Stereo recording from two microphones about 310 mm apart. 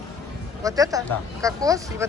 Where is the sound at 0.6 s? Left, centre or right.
Centre.